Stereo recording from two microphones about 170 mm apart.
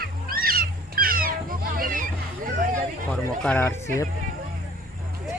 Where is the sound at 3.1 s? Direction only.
10° left (ahead or behind).